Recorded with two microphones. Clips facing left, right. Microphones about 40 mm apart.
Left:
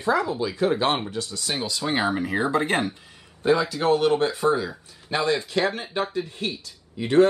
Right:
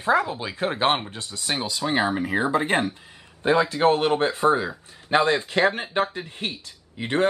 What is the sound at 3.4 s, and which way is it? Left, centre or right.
Speech, right.